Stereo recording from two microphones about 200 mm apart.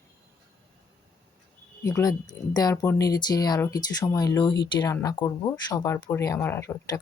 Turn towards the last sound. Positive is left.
turn(degrees=10)  # may be behind; listen again after turning